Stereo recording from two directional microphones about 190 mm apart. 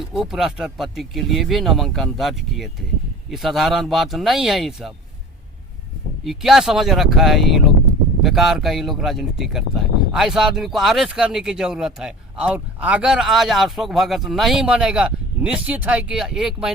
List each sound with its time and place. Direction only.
0.1 s speech: centre (ahead or behind)
6.2 s speech: centre (ahead or behind)